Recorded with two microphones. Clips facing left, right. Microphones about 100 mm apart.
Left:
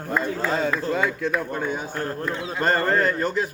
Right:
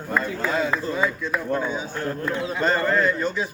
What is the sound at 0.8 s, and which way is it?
A man's voice, 65° left (ahead or behind).